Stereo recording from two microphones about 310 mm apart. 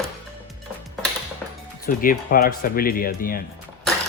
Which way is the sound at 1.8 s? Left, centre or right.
Left.